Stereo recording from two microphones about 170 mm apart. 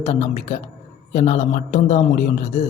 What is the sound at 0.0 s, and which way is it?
A man's voice, 40° left (ahead or behind).